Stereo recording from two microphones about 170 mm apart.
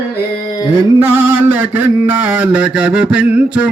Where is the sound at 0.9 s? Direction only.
15° right (ahead or behind).